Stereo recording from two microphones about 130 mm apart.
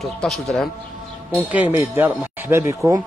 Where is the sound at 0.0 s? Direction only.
5° left (ahead or behind).